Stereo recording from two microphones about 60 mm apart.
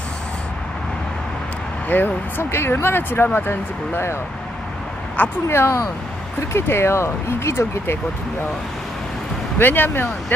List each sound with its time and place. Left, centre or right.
1.9 s speech: left
5.5 s speech: left
9.6 s speech: left